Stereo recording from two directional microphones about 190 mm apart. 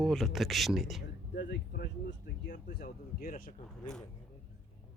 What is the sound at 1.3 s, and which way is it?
Speech, 70° left (ahead or behind).